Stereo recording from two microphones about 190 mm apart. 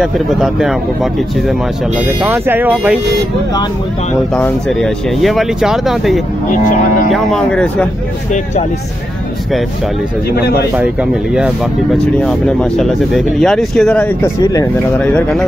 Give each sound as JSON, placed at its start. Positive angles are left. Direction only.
{"t": 0.0, "sound": "speech", "side_deg": 0}
{"t": 2.2, "sound": "speech", "side_deg": -10}
{"t": 4.3, "sound": "speech", "side_deg": 5}
{"t": 10.8, "sound": "speech", "side_deg": -5}
{"t": 14.4, "sound": "speech", "side_deg": 20}
{"t": 15.0, "sound": "speech", "side_deg": 5}